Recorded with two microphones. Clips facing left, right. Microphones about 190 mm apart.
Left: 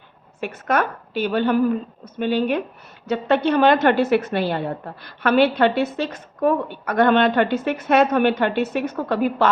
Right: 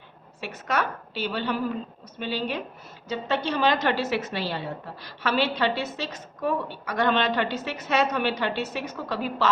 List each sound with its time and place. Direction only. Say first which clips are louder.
0.3 s a woman's voice: left 6 dB; 55° left (ahead or behind)